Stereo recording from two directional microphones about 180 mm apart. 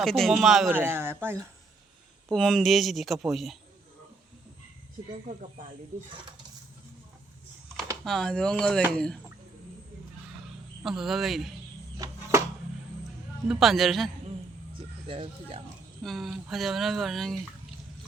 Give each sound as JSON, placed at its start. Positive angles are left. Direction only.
{"t": 0.0, "sound": "speech", "side_deg": 0}
{"t": 2.3, "sound": "speech", "side_deg": 0}
{"t": 5.3, "sound": "speech", "side_deg": -40}
{"t": 8.0, "sound": "speech", "side_deg": 0}
{"t": 10.8, "sound": "speech", "side_deg": 0}
{"t": 11.9, "sound": "a sound", "side_deg": -15}
{"t": 13.5, "sound": "speech", "side_deg": 0}
{"t": 15.0, "sound": "speech", "side_deg": -30}
{"t": 16.0, "sound": "speech", "side_deg": 0}